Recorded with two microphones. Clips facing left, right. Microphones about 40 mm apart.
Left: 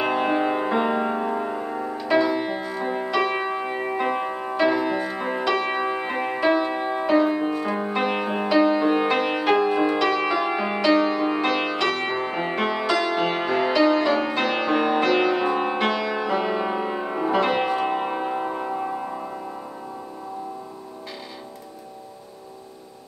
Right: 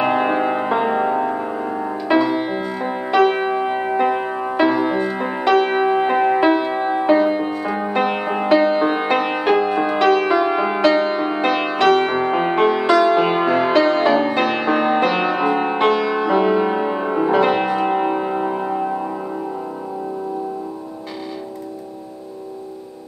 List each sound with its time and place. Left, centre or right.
0.0 s music: centre
1.9 s music: centre
5.4 s music: right
5.7 s music: centre
8.5 s music: right
13.6 s music: right; by 18.9 s centre